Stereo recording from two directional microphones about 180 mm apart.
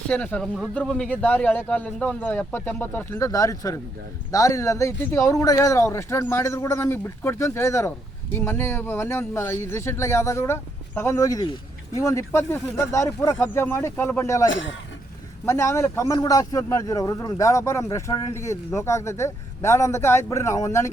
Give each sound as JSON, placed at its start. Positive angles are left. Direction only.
{"t": 0.1, "sound": "speech", "side_deg": 5}